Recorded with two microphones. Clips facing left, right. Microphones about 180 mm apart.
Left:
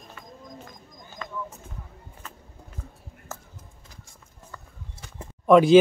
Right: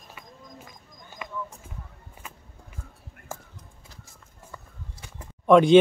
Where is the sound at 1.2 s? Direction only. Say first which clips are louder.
Even; 15° right (ahead or behind).